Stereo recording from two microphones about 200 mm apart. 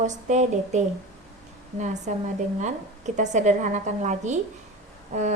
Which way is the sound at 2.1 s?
35° right (ahead or behind).